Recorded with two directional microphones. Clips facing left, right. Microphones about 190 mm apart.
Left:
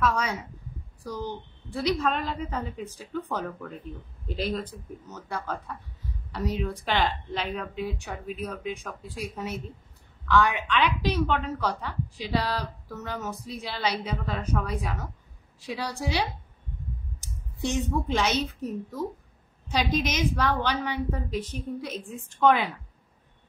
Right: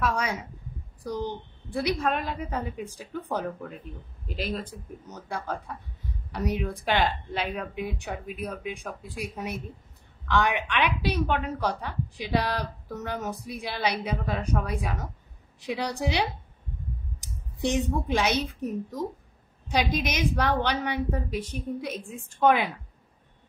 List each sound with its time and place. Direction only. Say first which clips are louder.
0.0 s a woman's voice: left 1 dB; 10° right (ahead or behind)
4.5 s a woman's voice: left 2 dB; 10° right (ahead or behind)
17.9 s a woman's voice: even; 10° right (ahead or behind)